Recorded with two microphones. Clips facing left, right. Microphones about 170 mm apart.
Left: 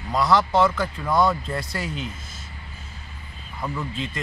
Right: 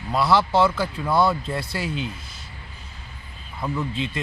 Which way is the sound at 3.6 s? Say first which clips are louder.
Right 3 dB; 10° right (ahead or behind).